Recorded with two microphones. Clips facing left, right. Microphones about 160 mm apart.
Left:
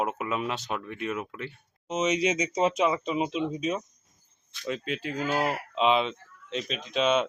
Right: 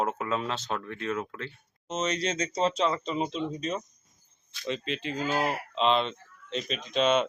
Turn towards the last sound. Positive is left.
turn(degrees=0)  # may be behind; listen again after turning